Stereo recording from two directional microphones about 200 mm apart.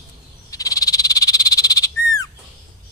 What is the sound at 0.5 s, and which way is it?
Frog, 15° left (ahead or behind).